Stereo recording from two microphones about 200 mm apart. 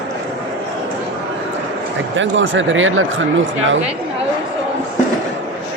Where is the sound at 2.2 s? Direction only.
70° right (ahead or behind).